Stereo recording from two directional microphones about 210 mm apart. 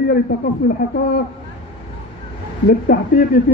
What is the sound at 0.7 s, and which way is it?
Speech, 45° left (ahead or behind).